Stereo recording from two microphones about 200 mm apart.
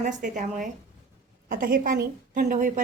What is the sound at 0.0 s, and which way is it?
A woman's voice, 35° right (ahead or behind).